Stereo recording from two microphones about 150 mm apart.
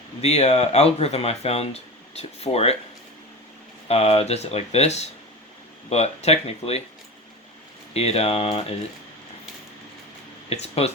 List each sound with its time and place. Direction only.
0.2 s speech: 45° left (ahead or behind)
3.8 s speech: 40° left (ahead or behind)
7.9 s speech: 45° left (ahead or behind)
10.5 s speech: 45° left (ahead or behind)